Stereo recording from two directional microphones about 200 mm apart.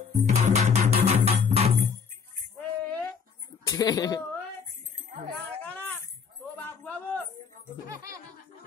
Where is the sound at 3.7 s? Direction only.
20° left (ahead or behind).